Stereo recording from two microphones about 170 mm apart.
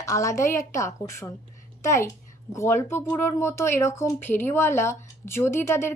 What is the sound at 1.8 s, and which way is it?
A child's voice, 15° left (ahead or behind).